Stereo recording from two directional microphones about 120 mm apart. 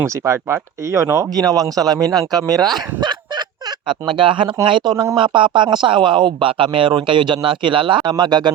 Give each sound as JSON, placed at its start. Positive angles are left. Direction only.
{"t": 0.0, "sound": "speech", "side_deg": -25}